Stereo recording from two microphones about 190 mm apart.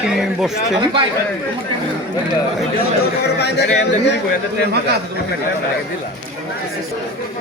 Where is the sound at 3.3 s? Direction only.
60° left (ahead or behind).